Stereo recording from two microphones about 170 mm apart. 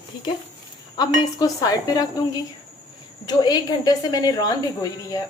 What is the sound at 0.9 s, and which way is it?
A woman's voice, 25° left (ahead or behind).